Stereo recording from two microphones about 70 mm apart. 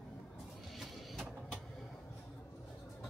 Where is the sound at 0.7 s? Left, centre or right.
Centre.